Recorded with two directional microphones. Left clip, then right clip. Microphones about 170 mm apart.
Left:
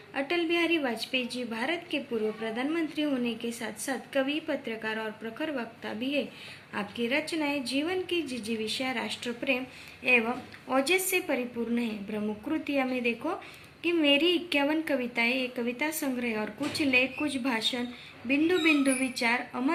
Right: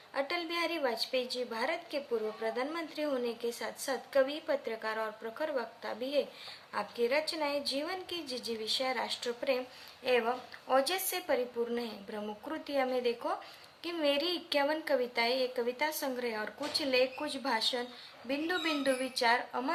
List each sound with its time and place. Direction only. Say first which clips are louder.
0.1 s a woman's voice: left 6 dB; 40° right (ahead or behind)